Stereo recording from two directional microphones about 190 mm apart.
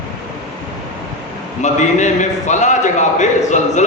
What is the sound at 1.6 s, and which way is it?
A man's voice, 40° left (ahead or behind).